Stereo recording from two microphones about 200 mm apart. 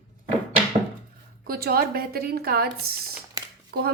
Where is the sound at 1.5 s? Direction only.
50° right (ahead or behind).